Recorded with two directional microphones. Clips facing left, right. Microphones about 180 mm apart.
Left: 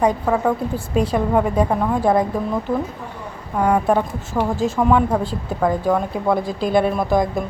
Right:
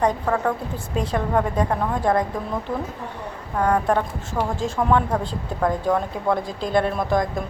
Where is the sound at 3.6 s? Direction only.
10° left (ahead or behind).